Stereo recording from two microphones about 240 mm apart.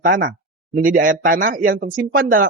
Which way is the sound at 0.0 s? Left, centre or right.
Right.